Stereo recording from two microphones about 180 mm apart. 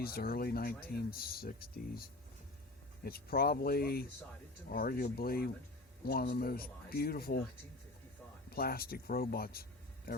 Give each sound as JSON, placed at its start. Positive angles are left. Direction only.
{"t": 0.0, "sound": "speech", "side_deg": 55}
{"t": 8.4, "sound": "speech", "side_deg": 55}